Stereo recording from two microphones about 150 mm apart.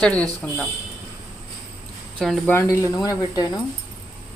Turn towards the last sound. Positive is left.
turn(degrees=25)  # may be behind; listen again after turning